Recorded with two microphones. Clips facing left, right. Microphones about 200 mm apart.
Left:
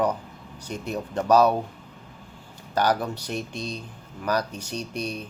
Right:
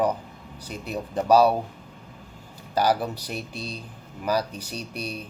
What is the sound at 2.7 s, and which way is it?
Speech, 10° right (ahead or behind).